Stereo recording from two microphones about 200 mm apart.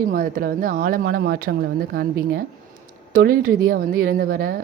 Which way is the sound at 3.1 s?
45° right (ahead or behind).